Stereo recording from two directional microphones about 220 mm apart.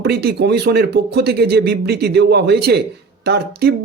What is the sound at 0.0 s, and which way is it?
A man's voice, 45° right (ahead or behind).